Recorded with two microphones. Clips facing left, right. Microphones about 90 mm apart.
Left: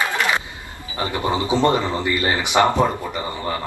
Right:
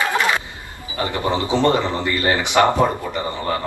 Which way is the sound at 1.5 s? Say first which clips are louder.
Right 1 dB; 15° left (ahead or behind).